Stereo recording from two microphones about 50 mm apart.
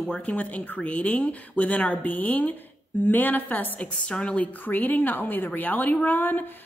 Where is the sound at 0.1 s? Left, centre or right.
Centre.